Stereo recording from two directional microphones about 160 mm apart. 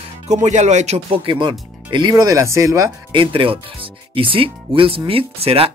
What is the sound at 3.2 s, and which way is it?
Speech, 35° right (ahead or behind).